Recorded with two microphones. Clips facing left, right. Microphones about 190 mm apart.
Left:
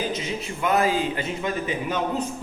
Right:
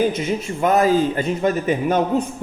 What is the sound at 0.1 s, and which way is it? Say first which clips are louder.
A man's voice: right 6 dB; 50° right (ahead or behind).